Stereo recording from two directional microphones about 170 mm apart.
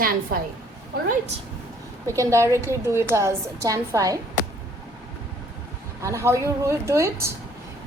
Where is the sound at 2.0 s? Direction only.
15° right (ahead or behind).